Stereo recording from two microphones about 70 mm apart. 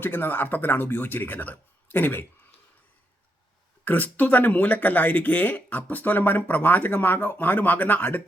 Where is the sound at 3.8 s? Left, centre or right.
Left.